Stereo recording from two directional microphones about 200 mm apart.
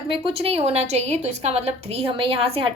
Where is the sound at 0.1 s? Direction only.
25° right (ahead or behind).